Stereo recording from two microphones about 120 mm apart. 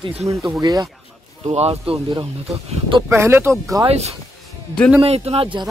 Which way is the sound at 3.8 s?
65° right (ahead or behind).